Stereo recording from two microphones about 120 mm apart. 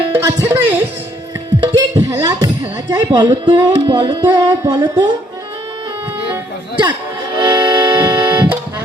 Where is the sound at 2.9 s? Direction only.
35° right (ahead or behind).